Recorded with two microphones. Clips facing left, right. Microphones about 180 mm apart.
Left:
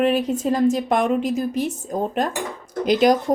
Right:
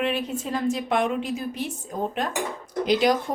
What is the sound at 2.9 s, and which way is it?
Speech, 45° left (ahead or behind).